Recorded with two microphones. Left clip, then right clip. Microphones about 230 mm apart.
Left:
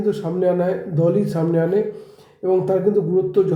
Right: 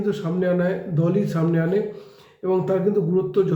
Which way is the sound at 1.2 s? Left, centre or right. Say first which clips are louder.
Left 3 dB; right.